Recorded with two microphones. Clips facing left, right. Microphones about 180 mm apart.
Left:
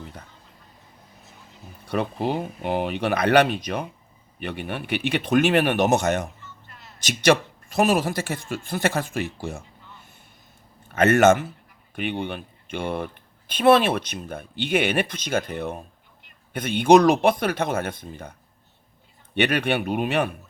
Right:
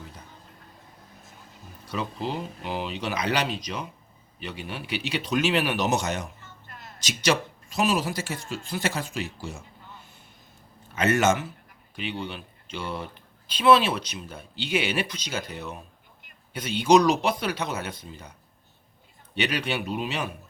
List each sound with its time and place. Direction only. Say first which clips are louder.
1.9 s speech: left 6 dB; 60° left (ahead or behind)
6.4 s a sound: even; 50° right (ahead or behind)
7.0 s speech: left 6 dB; 55° left (ahead or behind)
10.9 s speech: left 6 dB; 55° left (ahead or behind)